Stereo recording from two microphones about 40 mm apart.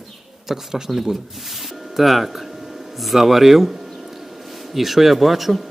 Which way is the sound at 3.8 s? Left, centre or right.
Centre.